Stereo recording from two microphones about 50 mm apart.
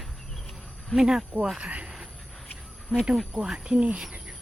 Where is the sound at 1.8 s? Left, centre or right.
Centre.